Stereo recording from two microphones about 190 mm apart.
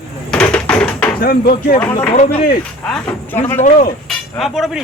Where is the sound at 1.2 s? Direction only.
50° left (ahead or behind).